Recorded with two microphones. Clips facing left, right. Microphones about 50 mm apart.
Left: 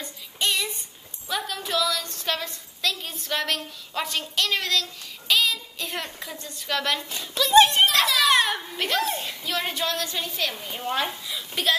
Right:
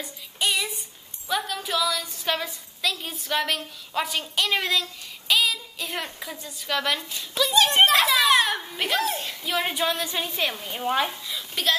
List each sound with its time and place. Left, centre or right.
0.0 s female singing: centre
5.3 s a woman's voice: centre
7.5 s a child's voice: left
7.9 s a child's voice: centre
10.5 s a woman's voice: centre